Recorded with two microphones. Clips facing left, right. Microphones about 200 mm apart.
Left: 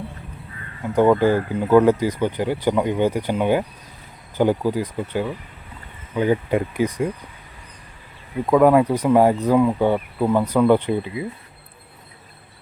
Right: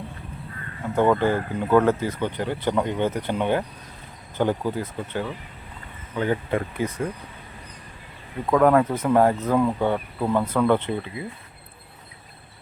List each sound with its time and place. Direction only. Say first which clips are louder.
0.9 s speech: left 4 dB; 10° left (ahead or behind)
8.4 s speech: left 3 dB; 10° left (ahead or behind)